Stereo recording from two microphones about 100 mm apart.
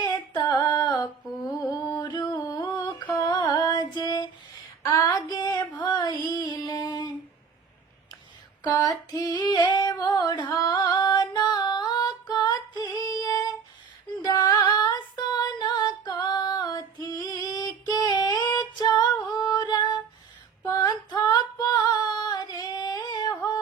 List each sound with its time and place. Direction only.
0.0 s a sound: 40° left (ahead or behind)
3.8 s female singing: 40° left (ahead or behind)
9.0 s female singing: 40° left (ahead or behind)